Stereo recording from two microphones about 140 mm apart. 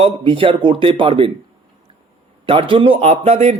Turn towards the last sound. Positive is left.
turn(degrees=-50)  # may be behind; listen again after turning